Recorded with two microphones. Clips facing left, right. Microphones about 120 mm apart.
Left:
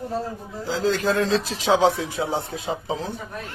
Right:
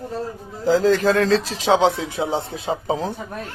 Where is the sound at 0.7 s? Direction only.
45° right (ahead or behind).